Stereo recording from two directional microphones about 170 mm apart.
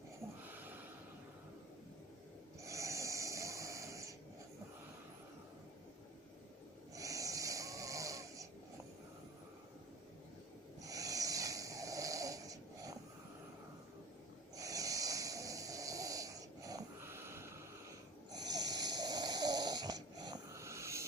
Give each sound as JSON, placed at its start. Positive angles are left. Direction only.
{"t": 0.4, "sound": "snort", "side_deg": -10}
{"t": 2.6, "sound": "snoring", "side_deg": -20}
{"t": 6.9, "sound": "snoring", "side_deg": -20}
{"t": 10.8, "sound": "snoring", "side_deg": -20}
{"t": 14.5, "sound": "snoring", "side_deg": -20}